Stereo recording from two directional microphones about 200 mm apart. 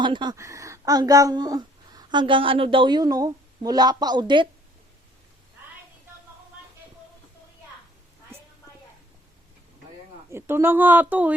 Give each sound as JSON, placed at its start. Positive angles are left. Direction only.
{"t": 0.0, "sound": "speech", "side_deg": -25}
{"t": 10.3, "sound": "speech", "side_deg": -10}